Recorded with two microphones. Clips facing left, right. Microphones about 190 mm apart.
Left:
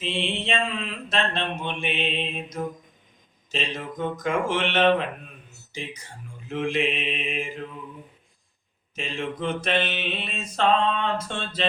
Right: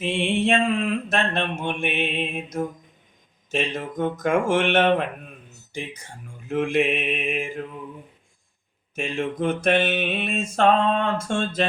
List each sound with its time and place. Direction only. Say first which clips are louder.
0.0 s mantra: right 6 dB; 50° right (ahead or behind)
6.5 s mantra: right 4 dB; 50° right (ahead or behind)
9.0 s mantra: right 4 dB; 50° right (ahead or behind)